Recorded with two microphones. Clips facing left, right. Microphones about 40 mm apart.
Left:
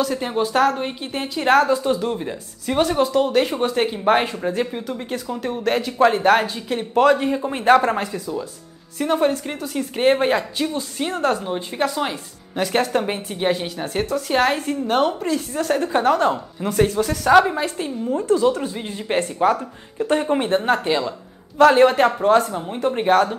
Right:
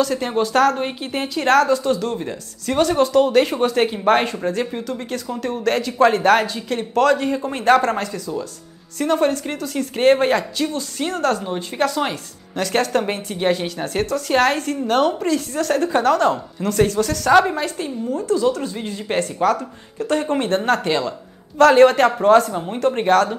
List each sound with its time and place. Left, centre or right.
0.0 s speech: centre
0.7 s speech: centre
2.1 s speech: centre
11.4 s speech: centre
18.0 s speech: left; by 23.3 s centre